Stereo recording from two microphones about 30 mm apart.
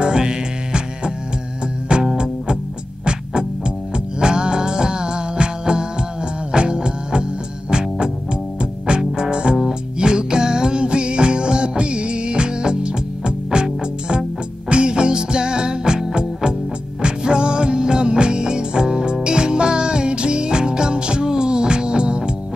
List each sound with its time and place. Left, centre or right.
0.0 s music: right
1.9 s music: right
3.1 s music: right
17.0 s music: right